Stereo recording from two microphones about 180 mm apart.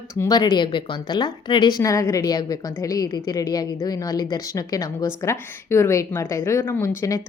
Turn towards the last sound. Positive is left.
turn(degrees=15)  # may be behind; listen again after turning